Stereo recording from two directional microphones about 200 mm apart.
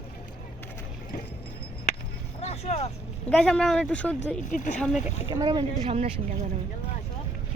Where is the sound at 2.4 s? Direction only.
35° left (ahead or behind).